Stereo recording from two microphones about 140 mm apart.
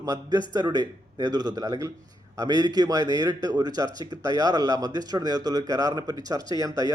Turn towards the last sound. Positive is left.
turn(degrees=-25)  # may be behind; listen again after turning